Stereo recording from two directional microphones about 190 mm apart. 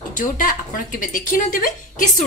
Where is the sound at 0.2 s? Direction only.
45° left (ahead or behind).